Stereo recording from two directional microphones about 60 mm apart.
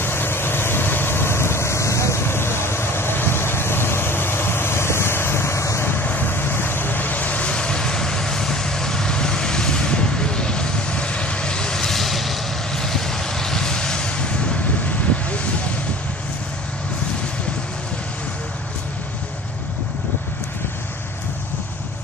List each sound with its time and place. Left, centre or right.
0.0 s vehicle: left
5.9 s vehicle: left